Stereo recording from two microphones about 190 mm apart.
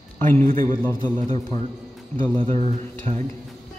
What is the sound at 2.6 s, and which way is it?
Speech, 35° right (ahead or behind).